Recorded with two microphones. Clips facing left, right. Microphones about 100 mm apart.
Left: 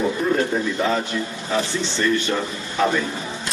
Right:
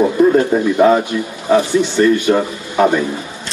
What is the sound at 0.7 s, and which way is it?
Speech, 50° right (ahead or behind).